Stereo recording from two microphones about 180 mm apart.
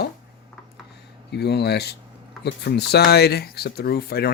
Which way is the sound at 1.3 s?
65° left (ahead or behind).